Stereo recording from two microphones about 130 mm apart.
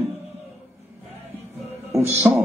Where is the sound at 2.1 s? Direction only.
15° right (ahead or behind).